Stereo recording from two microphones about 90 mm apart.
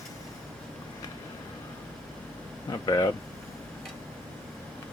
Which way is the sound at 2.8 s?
45° left (ahead or behind).